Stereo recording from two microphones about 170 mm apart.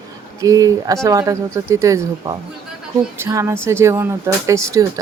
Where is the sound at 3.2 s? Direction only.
15° right (ahead or behind).